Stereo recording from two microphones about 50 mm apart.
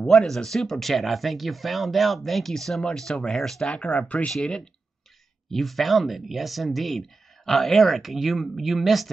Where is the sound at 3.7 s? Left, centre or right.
Left.